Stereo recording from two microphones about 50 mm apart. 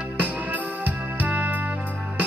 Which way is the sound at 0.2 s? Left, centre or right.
Right.